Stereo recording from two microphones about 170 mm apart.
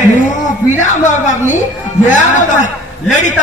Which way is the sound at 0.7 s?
45° left (ahead or behind).